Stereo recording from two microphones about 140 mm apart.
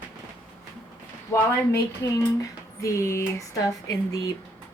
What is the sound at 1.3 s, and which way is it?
Speech, 20° left (ahead or behind).